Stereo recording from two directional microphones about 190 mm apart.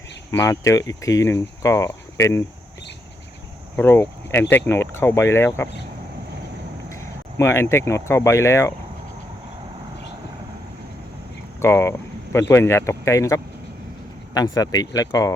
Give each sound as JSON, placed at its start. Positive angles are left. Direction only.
{"t": 0.3, "sound": "speech", "side_deg": 15}
{"t": 3.8, "sound": "speech", "side_deg": 10}
{"t": 6.9, "sound": "speech", "side_deg": 15}
{"t": 11.6, "sound": "speech", "side_deg": 15}